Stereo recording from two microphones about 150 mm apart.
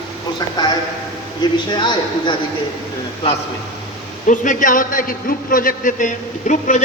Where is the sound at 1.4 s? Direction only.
30° left (ahead or behind).